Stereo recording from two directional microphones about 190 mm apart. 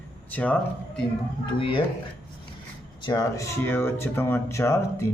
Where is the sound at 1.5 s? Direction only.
25° left (ahead or behind).